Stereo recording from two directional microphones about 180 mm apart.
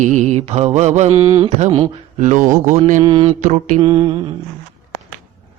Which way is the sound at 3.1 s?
25° right (ahead or behind).